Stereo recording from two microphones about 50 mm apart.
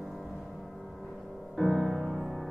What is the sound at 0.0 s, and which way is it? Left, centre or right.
Music, centre.